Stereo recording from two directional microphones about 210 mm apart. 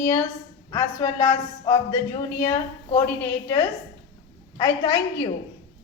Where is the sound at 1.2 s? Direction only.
20° left (ahead or behind).